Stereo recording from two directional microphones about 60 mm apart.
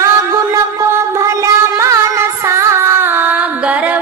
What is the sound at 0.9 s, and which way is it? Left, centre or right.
Music, right.